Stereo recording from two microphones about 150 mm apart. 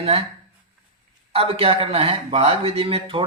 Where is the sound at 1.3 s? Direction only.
40° right (ahead or behind).